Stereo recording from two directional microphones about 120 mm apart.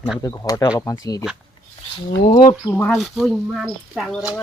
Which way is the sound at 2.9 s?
Centre (ahead or behind).